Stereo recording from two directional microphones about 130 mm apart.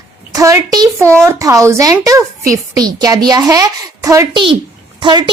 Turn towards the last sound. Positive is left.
turn(degrees=-35)  # may be behind; listen again after turning